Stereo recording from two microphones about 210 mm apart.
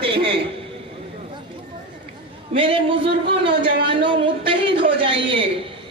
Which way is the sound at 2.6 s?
25° right (ahead or behind).